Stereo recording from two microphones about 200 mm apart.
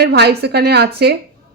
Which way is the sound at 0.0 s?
55° right (ahead or behind).